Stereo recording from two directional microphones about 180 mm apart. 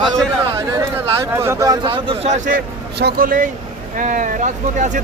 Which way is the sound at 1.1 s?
15° right (ahead or behind).